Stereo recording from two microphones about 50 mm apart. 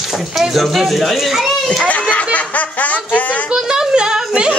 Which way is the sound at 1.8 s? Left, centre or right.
Left.